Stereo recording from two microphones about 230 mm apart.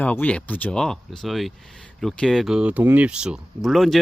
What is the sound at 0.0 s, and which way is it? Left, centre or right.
A man's voice, centre.